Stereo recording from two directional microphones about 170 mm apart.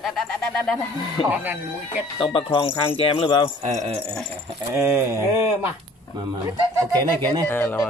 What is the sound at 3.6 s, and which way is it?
Speech, 40° right (ahead or behind).